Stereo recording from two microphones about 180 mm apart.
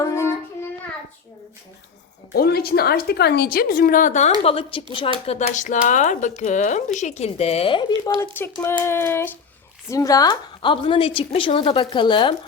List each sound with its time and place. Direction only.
0.0 s child singing: 15° left (ahead or behind)
2.3 s a woman's voice: 60° left (ahead or behind)
4.4 s speech: 30° left (ahead or behind)
8.8 s child singing: 15° left (ahead or behind)
9.9 s a woman's voice: 20° left (ahead or behind)